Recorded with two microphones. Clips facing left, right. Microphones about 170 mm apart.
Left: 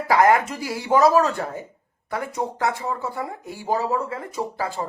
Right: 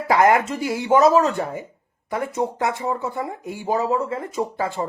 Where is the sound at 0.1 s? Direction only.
20° right (ahead or behind).